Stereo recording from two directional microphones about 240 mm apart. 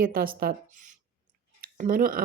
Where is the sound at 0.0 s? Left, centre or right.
Right.